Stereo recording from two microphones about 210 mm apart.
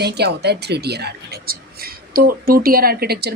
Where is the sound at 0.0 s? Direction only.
50° right (ahead or behind).